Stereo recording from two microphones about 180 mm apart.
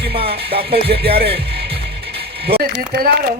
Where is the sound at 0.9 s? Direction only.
60° right (ahead or behind).